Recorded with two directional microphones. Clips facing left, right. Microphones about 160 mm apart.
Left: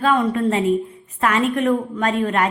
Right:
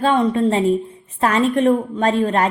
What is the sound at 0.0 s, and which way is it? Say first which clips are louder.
A woman's voice: right 2 dB; 25° right (ahead or behind).